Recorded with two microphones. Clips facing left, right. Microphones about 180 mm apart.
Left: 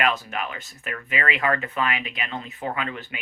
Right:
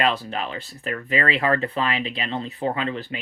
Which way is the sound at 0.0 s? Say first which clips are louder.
Right 2 dB; 30° right (ahead or behind).